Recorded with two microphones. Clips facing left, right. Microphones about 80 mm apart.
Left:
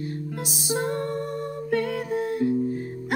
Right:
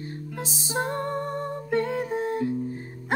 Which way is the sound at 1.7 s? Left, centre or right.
Right.